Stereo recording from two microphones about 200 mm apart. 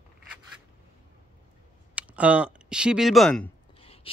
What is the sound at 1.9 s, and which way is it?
Speech, 5° right (ahead or behind).